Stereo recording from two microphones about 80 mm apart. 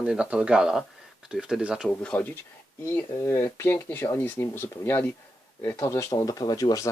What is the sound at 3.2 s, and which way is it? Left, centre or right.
Speech, left.